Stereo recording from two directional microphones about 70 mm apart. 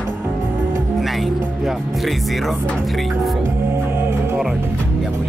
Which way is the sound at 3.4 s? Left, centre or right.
Right.